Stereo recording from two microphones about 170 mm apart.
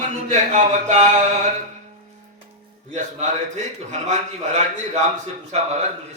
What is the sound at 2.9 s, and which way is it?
A man's voice, 40° right (ahead or behind).